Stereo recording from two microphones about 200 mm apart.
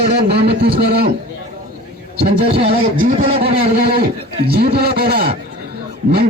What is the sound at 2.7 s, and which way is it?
Speech, 45° right (ahead or behind).